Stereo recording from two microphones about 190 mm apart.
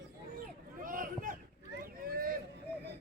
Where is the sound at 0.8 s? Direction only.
45° right (ahead or behind).